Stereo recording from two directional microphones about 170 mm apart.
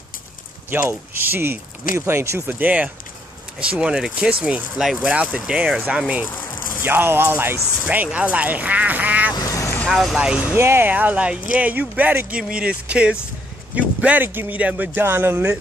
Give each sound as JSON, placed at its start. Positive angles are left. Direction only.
{"t": 0.7, "sound": "speech", "side_deg": -15}
{"t": 9.3, "sound": "vehicle", "side_deg": 20}
{"t": 9.8, "sound": "speech", "side_deg": 0}